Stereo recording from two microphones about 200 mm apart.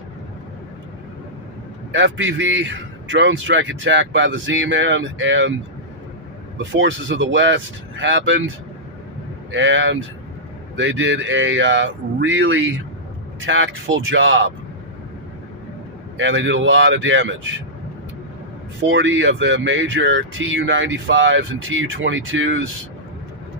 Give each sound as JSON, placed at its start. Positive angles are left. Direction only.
{"t": 1.9, "sound": "speech", "side_deg": -70}
{"t": 6.7, "sound": "speech", "side_deg": -65}
{"t": 9.5, "sound": "speech", "side_deg": -70}
{"t": 16.1, "sound": "speech", "side_deg": -70}
{"t": 18.9, "sound": "speech", "side_deg": -65}